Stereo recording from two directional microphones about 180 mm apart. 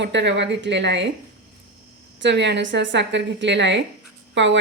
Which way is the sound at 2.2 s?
75° right (ahead or behind).